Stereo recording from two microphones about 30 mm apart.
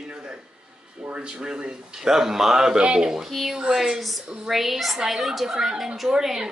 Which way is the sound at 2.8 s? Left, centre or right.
Right.